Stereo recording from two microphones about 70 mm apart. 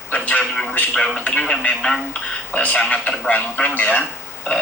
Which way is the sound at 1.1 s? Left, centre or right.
Centre.